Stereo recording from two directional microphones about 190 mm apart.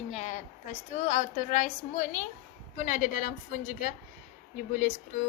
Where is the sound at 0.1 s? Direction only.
35° left (ahead or behind).